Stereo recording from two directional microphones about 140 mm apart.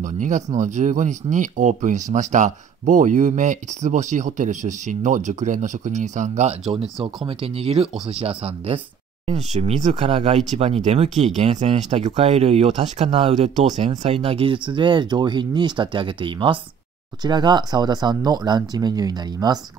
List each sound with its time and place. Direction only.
0.0 s speech: 60° right (ahead or behind); by 19.6 s 25° right (ahead or behind)